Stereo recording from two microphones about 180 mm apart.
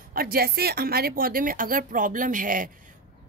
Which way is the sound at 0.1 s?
55° right (ahead or behind).